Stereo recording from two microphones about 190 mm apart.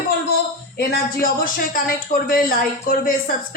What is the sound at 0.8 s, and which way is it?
Speech, 55° left (ahead or behind).